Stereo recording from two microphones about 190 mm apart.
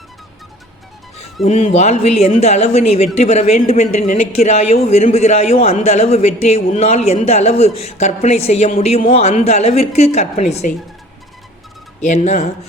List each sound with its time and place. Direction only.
1.5 s speech: 35° left (ahead or behind)
11.9 s speech: 35° left (ahead or behind)